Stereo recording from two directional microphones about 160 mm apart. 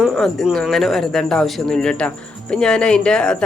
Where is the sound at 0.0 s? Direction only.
Centre (ahead or behind).